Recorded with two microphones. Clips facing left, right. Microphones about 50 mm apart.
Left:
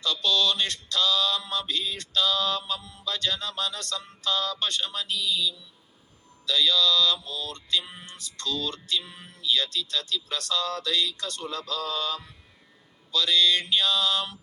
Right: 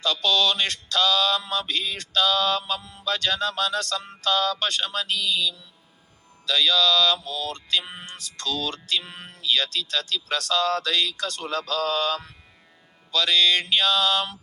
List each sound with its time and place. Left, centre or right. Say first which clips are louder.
0.0 s mantra: right 3 dB; right
3.0 s music: right 6 dB; right
6.4 s music: right 2 dB; right
7.5 s mantra: right 2 dB; right
8.4 s music: right 2 dB; right
13.1 s mantra: right 2 dB; right